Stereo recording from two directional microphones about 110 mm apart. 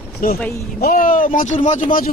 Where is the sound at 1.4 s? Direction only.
90° left.